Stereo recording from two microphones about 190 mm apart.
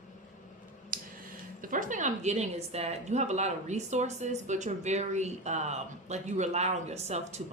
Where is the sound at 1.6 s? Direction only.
45° right (ahead or behind).